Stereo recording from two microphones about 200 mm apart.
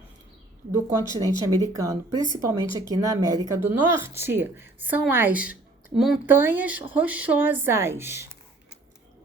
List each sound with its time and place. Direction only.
1.2 s speech: 20° right (ahead or behind)